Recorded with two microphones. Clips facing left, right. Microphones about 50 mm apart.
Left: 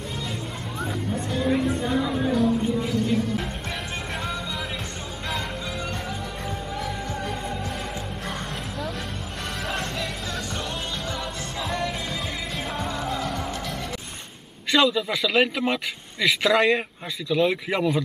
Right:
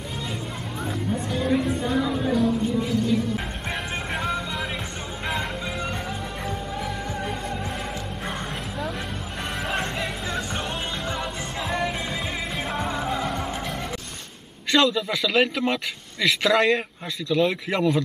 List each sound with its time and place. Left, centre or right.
0.7 s music: centre
1.2 s a sound: centre
6.8 s music: centre
9.8 s music: right
11.7 s music: centre
14.7 s a man's voice: centre